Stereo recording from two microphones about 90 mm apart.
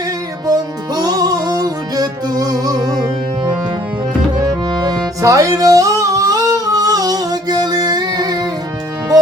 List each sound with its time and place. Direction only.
0.4 s music: 45° right (ahead or behind)
4.7 s music: 50° right (ahead or behind)